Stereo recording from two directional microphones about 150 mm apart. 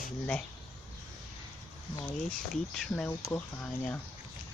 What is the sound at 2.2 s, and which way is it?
Speech, 5° left (ahead or behind).